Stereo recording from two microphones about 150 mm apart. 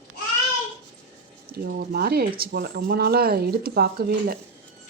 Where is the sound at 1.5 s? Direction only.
90° right.